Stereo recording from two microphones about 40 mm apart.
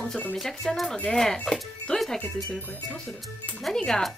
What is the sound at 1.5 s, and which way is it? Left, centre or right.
Speech, centre.